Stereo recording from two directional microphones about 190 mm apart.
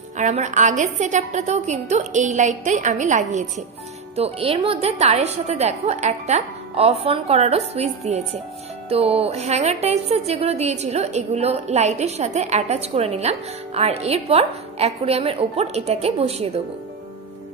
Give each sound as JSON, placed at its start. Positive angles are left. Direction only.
{"t": 0.2, "sound": "a woman's voice", "side_deg": -40}